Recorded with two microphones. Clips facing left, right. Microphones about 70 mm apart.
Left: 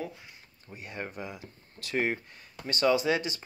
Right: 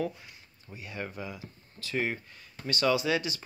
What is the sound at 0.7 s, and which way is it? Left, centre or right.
Speech, left.